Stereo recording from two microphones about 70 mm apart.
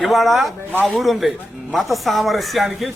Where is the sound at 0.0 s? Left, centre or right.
Centre.